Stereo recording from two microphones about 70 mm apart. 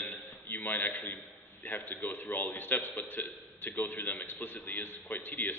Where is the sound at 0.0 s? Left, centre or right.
Left.